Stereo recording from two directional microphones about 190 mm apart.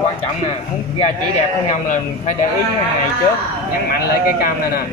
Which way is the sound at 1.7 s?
40° left (ahead or behind).